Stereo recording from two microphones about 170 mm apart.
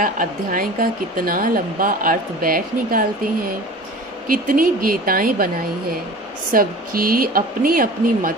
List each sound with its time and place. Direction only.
0.0 s speech: 55° right (ahead or behind)
4.3 s speech: 55° right (ahead or behind)
6.5 s speech: 60° right (ahead or behind)